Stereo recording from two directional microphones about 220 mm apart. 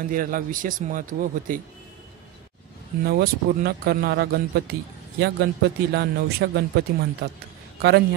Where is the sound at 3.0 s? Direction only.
45° right (ahead or behind).